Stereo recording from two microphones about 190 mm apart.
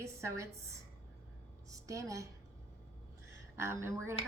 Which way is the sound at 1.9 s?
15° right (ahead or behind).